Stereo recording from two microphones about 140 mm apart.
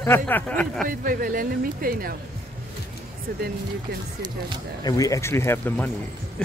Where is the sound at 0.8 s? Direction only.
85° right.